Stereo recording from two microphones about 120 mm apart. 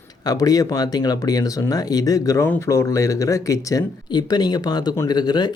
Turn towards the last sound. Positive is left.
turn(degrees=35)  # may be behind; listen again after turning